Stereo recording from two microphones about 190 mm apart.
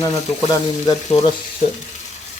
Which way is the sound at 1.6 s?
35° left (ahead or behind).